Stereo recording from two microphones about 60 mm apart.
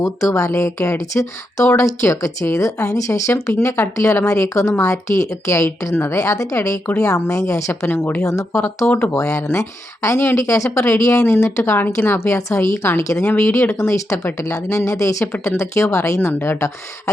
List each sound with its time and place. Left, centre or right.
0.0 s speech: left
7.9 s speech: left
8.2 s speech: left
11.9 s a woman's voice: left
12.4 s speech: left
12.8 s speech: left
13.4 s a woman's voice: left
15.4 s a woman's voice: left